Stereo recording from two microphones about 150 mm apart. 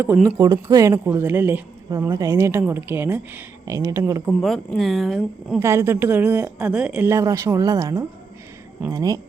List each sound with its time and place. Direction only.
0.0 s a woman's voice: 15° right (ahead or behind)
0.3 s a woman's voice: 25° right (ahead or behind)
1.9 s a woman's voice: 25° right (ahead or behind)
4.3 s speech: centre (ahead or behind)
5.5 s a woman's voice: 15° right (ahead or behind)